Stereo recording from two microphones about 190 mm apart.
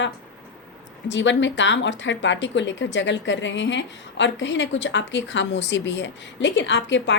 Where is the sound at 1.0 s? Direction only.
70° left (ahead or behind).